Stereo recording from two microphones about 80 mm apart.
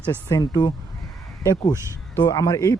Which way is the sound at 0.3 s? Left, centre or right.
Left.